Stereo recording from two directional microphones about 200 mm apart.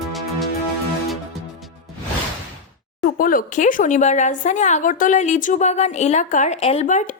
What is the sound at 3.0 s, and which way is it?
Speech, 45° left (ahead or behind).